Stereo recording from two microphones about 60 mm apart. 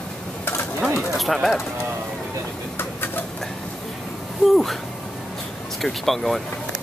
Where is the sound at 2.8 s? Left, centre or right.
Left.